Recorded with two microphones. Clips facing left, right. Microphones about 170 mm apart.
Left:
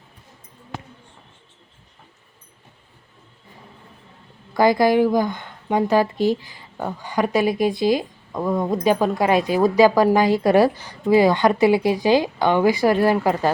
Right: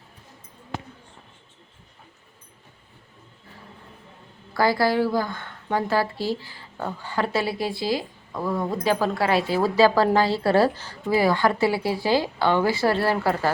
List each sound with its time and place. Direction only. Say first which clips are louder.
4.5 s a woman's voice: left 5 dB; 20° left (ahead or behind)